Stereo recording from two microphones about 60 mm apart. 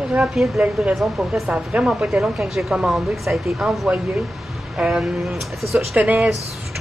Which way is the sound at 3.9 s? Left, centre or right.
Centre.